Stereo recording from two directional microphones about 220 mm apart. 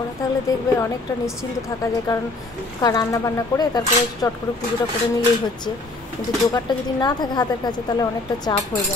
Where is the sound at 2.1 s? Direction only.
20° left (ahead or behind).